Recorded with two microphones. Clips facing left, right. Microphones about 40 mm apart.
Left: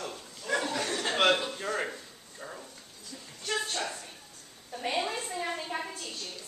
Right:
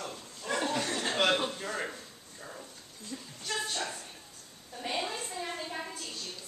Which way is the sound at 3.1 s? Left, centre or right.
Centre.